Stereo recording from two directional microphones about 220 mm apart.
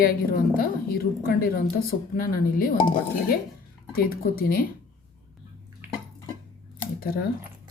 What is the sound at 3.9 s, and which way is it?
Speech, 40° left (ahead or behind).